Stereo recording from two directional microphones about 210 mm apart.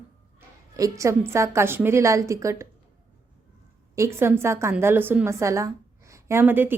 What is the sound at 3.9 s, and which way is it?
A woman's voice, 15° right (ahead or behind).